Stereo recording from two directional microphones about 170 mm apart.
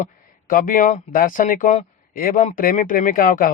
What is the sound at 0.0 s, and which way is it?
Speech, 55° left (ahead or behind).